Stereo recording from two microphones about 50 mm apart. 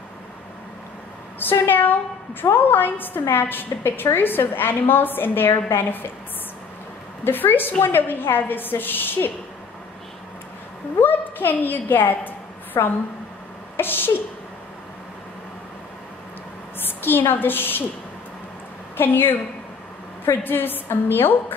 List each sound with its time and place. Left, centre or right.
1.4 s a woman's voice: left
7.2 s a woman's voice: left
11.0 s a woman's voice: left
13.7 s a woman's voice: left
16.8 s a woman's voice: left
18.9 s a woman's voice: left
20.4 s a woman's voice: left